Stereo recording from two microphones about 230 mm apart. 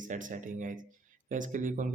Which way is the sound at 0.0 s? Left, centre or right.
Right.